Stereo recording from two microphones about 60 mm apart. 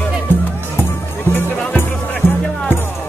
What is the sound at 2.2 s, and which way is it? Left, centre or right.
Music, left.